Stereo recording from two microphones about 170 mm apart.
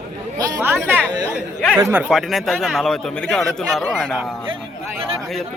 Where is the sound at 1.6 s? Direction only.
5° left (ahead or behind).